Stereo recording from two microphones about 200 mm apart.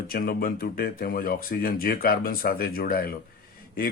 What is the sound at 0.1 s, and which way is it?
Speech, 50° left (ahead or behind).